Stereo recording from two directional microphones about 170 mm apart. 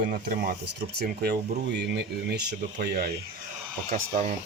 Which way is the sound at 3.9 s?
50° right (ahead or behind).